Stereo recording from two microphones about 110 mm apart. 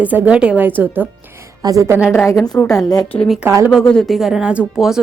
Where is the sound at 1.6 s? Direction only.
30° right (ahead or behind).